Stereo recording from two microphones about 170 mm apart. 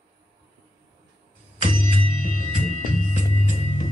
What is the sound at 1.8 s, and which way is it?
Music, 50° left (ahead or behind).